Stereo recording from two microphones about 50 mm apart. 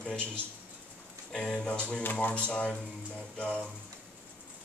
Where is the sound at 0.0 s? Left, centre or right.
Centre.